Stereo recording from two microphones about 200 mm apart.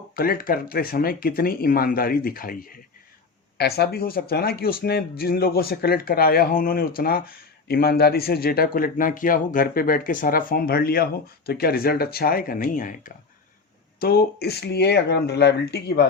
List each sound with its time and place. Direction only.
0.2 s speech: 45° left (ahead or behind)